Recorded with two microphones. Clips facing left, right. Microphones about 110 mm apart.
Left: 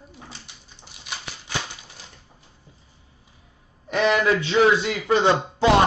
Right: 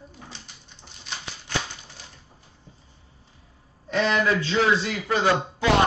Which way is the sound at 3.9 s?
20° left (ahead or behind).